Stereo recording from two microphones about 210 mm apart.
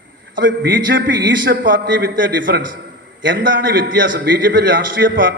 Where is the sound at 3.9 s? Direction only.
60° right (ahead or behind).